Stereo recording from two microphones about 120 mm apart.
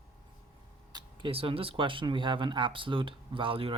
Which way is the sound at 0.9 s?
45° right (ahead or behind).